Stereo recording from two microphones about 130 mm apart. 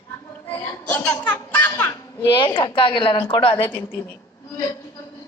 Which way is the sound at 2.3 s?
40° left (ahead or behind).